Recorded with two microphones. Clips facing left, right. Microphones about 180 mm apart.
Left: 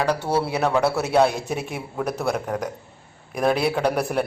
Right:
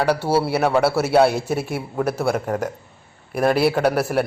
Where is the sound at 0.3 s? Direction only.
5° right (ahead or behind).